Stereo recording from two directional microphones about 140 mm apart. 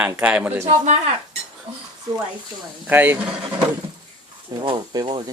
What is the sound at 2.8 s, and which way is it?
Speech, 15° right (ahead or behind).